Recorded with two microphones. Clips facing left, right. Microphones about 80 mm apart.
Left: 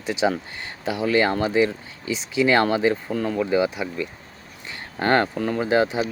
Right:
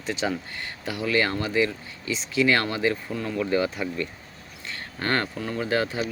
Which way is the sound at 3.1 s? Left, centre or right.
Left.